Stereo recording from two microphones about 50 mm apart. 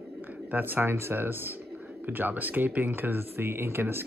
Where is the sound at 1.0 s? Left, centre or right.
Right.